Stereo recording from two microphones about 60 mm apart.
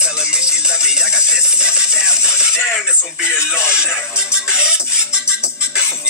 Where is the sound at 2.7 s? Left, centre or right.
Centre.